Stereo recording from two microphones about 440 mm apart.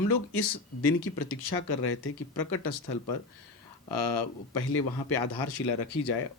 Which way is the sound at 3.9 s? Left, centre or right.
Left.